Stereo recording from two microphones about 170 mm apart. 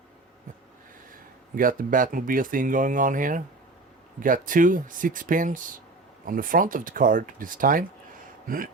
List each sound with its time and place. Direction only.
1.1 s speech: 55° right (ahead or behind)